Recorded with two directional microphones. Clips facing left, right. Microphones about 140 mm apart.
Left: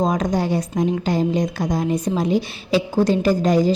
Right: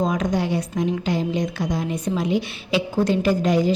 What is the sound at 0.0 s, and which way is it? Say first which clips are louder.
A woman's voice: left 2 dB; 40° left (ahead or behind).